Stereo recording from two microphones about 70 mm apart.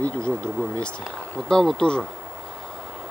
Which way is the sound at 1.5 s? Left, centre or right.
Centre.